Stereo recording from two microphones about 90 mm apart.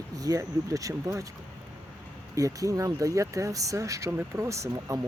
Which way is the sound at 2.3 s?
40° right (ahead or behind).